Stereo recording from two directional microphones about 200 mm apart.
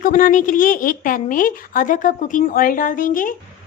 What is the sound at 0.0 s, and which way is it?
A woman's voice, 40° left (ahead or behind).